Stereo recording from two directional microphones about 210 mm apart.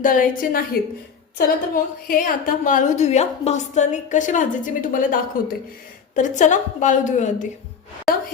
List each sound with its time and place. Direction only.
0.0 s a woman's voice: 40° left (ahead or behind)